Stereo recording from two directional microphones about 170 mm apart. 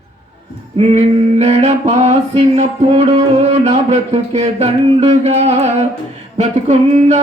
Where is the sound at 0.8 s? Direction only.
40° right (ahead or behind).